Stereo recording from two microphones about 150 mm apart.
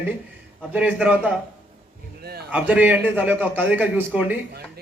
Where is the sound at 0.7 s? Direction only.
10° right (ahead or behind).